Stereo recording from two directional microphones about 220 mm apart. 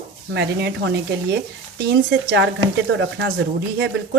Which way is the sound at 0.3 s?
50° right (ahead or behind).